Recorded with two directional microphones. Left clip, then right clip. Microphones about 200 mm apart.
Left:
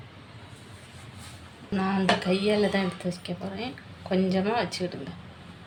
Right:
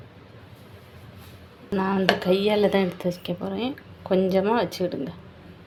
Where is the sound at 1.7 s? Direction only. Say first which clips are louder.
Right 3 dB; 40° right (ahead or behind).